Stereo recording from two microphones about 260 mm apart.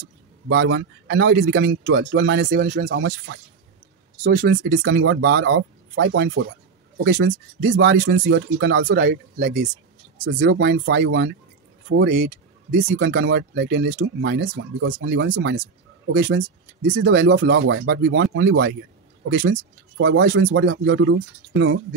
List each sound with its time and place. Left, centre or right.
0.5 s speech: right